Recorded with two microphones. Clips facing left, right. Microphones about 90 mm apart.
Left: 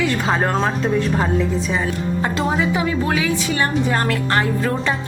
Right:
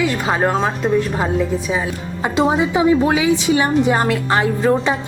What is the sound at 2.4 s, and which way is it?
A woman's voice, 20° right (ahead or behind).